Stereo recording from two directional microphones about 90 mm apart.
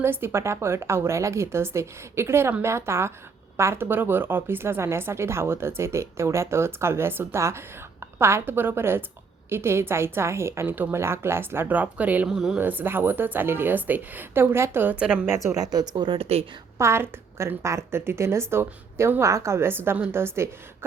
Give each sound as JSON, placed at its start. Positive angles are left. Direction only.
{"t": 0.0, "sound": "speech", "side_deg": -25}
{"t": 12.3, "sound": "speech", "side_deg": -5}
{"t": 12.5, "sound": "speech", "side_deg": -20}
{"t": 15.5, "sound": "speech", "side_deg": -45}
{"t": 16.7, "sound": "a woman's voice", "side_deg": -30}